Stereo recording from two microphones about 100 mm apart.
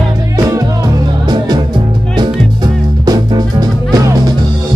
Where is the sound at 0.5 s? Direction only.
40° right (ahead or behind).